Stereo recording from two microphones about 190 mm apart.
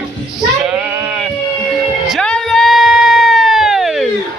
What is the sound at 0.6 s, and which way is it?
Bleat, 5° right (ahead or behind).